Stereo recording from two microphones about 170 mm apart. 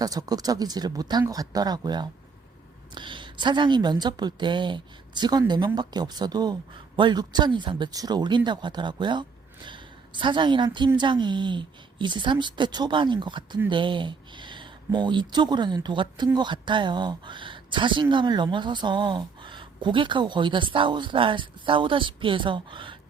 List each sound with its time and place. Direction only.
0.0 s speech: 20° right (ahead or behind)